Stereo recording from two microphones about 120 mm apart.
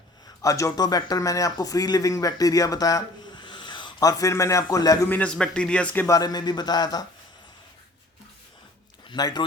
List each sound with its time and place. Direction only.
0.4 s speech: 25° left (ahead or behind)
4.2 s a man's voice: 25° left (ahead or behind)
5.0 s a man's voice: 10° left (ahead or behind)
6.1 s a man's voice: 30° left (ahead or behind)
9.0 s speech: 35° left (ahead or behind)